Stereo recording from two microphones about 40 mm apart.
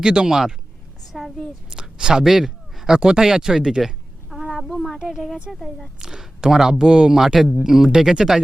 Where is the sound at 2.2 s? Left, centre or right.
Centre.